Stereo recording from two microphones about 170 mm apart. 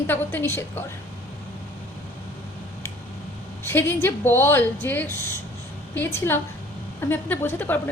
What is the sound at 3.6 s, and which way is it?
A man's voice, 15° left (ahead or behind).